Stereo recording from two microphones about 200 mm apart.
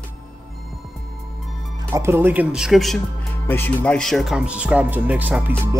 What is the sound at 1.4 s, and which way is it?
Music, centre (ahead or behind).